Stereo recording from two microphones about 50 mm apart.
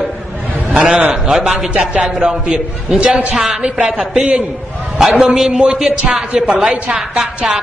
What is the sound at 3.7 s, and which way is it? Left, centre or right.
A woman's voice, centre.